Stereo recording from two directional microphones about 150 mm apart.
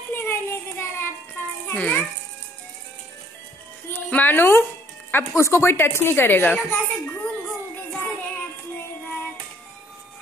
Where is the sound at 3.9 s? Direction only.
10° left (ahead or behind).